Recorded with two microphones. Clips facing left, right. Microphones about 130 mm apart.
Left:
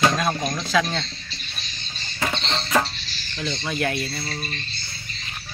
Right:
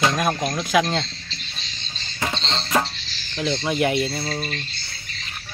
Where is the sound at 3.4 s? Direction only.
20° right (ahead or behind).